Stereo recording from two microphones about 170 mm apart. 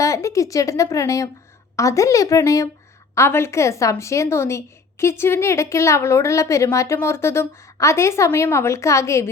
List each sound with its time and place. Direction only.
0.0 s a woman's voice: 20° left (ahead or behind)